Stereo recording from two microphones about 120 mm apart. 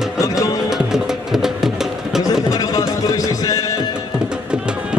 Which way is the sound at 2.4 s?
30° left (ahead or behind).